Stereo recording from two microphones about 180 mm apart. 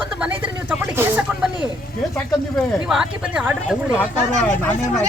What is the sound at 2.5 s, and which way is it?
Speech, centre (ahead or behind).